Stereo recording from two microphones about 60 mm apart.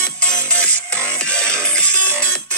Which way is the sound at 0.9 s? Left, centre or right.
Right.